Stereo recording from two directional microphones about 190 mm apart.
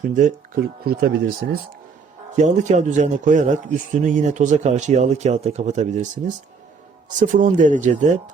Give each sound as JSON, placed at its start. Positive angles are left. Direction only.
{"t": 0.1, "sound": "speech", "side_deg": -45}
{"t": 2.3, "sound": "speech", "side_deg": -40}